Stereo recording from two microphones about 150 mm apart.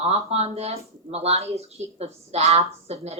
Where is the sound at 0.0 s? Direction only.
45° right (ahead or behind).